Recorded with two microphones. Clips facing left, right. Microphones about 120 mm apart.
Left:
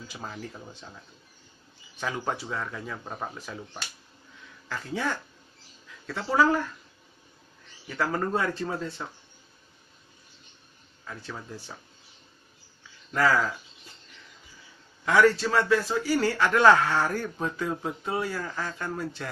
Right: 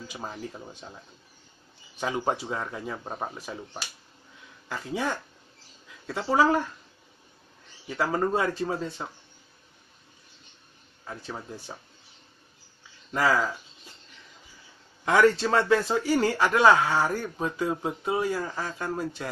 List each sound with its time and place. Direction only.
0.1 s a man's voice: 20° right (ahead or behind)
2.0 s a man's voice: 20° right (ahead or behind)
8.0 s a man's voice: 15° right (ahead or behind)
11.2 s speech: 20° right (ahead or behind)
13.1 s a man's voice: 15° right (ahead or behind)
15.0 s a man's voice: 25° right (ahead or behind)